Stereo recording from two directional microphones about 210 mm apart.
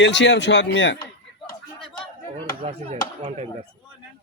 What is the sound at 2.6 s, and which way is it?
Speech, 30° right (ahead or behind).